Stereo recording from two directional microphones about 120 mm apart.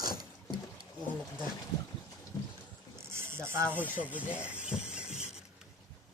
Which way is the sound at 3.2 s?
20° right (ahead or behind).